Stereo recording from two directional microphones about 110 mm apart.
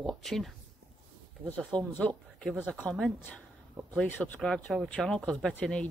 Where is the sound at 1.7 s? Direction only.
45° right (ahead or behind).